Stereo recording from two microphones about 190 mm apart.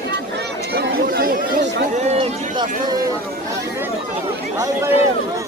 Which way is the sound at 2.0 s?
30° right (ahead or behind).